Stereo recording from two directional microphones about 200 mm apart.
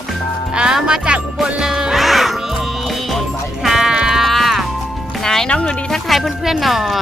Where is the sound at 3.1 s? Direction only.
Centre (ahead or behind).